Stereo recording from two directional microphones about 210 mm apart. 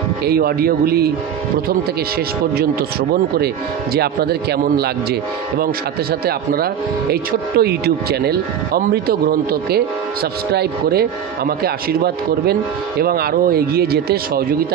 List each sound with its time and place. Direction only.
0.2 s speech: 50° right (ahead or behind)
2.5 s speech: 50° right (ahead or behind)
6.2 s speech: 45° right (ahead or behind)